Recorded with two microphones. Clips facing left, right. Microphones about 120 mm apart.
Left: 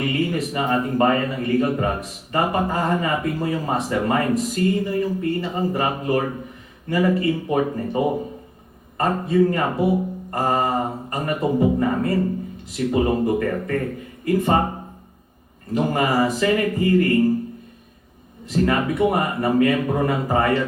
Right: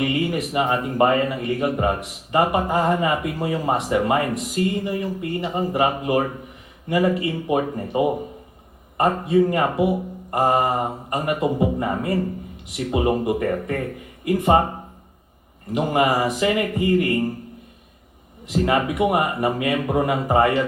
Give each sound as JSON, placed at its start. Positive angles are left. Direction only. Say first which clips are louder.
{"t": 0.0, "sound": "a man's voice", "louder": "even", "side_deg": -20}
{"t": 15.7, "sound": "a man's voice", "louder": "right 1 dB", "side_deg": -20}
{"t": 18.4, "sound": "speech", "louder": "even", "side_deg": -20}